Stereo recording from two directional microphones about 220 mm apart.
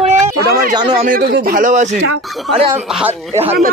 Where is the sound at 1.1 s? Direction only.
45° right (ahead or behind).